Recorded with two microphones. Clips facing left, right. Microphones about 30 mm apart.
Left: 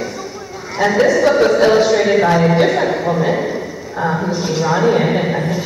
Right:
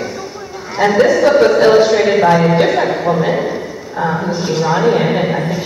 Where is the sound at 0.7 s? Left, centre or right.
Centre.